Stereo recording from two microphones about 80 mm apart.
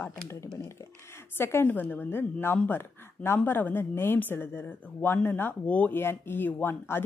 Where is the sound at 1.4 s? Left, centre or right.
Left.